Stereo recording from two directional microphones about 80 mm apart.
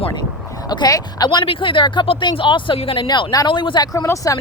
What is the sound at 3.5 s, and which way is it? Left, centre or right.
Speech, left.